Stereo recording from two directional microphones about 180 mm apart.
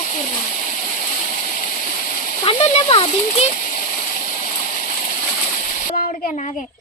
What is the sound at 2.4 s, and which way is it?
Speech, 30° left (ahead or behind).